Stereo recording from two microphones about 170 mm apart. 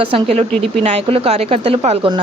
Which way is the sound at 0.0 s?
30° right (ahead or behind).